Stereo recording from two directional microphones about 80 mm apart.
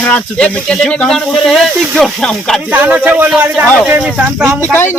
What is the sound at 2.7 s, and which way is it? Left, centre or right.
Speech, centre.